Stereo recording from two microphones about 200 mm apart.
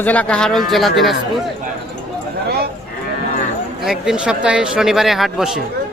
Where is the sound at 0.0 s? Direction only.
5° left (ahead or behind).